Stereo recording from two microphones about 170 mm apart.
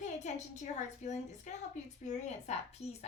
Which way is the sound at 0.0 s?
45° left (ahead or behind).